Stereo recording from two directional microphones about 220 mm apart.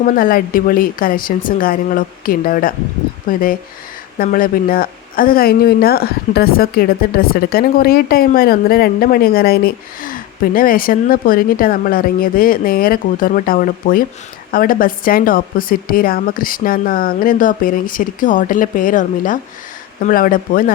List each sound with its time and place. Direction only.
0.0 s speech: 40° left (ahead or behind)